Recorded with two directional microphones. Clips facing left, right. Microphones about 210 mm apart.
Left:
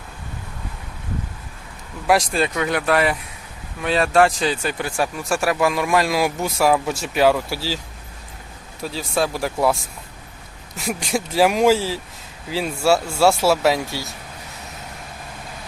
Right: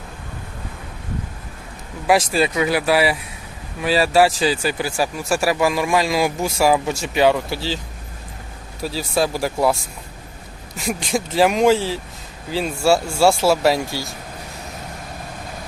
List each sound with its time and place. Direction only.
2.0 s speech: centre (ahead or behind)
8.8 s speech: 5° right (ahead or behind)
10.8 s speech: 5° left (ahead or behind)